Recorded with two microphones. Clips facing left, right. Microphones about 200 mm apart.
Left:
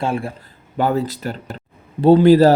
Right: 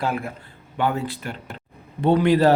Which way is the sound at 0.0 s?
30° left (ahead or behind).